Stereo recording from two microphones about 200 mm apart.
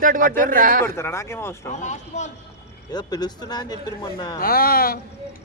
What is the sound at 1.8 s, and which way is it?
Speech, 35° left (ahead or behind).